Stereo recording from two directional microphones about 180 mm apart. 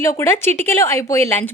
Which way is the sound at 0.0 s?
15° left (ahead or behind).